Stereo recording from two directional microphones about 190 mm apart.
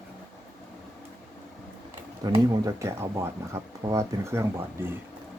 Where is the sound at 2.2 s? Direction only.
20° right (ahead or behind).